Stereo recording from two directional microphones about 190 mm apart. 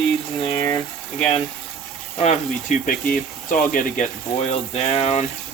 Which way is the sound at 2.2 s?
40° left (ahead or behind).